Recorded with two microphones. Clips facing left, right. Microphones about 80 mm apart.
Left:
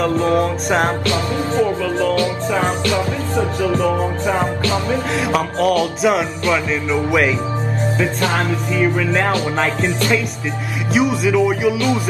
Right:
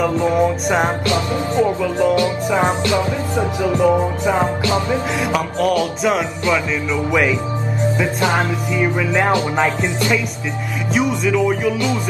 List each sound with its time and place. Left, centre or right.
0.0 s music: centre
1.0 s music: right
5.2 s music: centre
8.2 s music: centre
10.9 s music: centre